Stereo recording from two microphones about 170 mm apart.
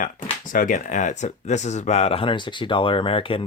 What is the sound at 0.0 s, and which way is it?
Speech, 50° left (ahead or behind).